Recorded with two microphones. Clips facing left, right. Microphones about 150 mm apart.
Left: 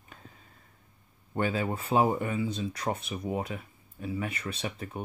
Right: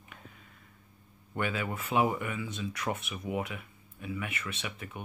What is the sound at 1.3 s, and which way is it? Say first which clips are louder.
Speech: left 4 dB; 35° left (ahead or behind).